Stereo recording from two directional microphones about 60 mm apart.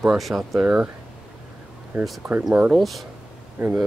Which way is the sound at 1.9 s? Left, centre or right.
Right.